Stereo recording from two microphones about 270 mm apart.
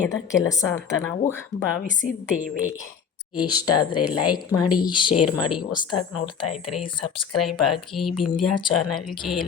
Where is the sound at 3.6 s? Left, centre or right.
Left.